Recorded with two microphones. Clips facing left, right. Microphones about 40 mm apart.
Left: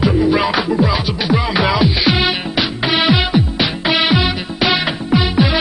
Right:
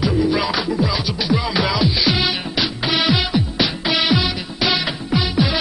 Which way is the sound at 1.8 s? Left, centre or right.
Left.